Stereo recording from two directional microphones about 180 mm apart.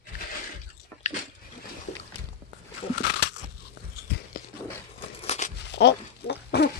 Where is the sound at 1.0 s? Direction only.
40° left (ahead or behind).